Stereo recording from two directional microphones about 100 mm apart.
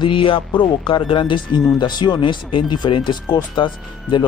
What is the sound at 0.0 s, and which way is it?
Speech, 60° left (ahead or behind).